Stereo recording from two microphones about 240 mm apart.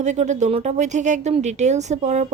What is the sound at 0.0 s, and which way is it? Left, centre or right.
A woman's voice, right.